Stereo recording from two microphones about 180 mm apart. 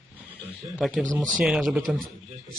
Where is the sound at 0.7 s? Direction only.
5° right (ahead or behind).